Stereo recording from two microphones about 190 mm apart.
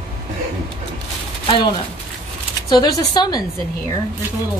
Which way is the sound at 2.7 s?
20° left (ahead or behind).